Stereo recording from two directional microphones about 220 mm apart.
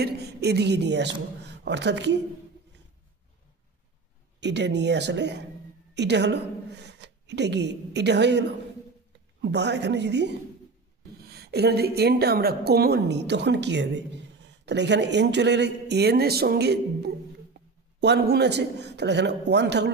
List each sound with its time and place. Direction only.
0.0 s a woman's voice: 50° right (ahead or behind)
4.4 s a woman's voice: 50° right (ahead or behind)